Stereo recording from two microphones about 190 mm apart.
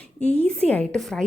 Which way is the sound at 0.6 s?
5° left (ahead or behind).